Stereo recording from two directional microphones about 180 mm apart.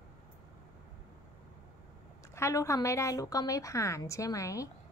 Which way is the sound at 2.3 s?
15° left (ahead or behind).